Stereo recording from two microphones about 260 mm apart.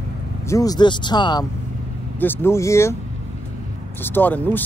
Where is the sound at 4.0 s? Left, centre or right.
Centre.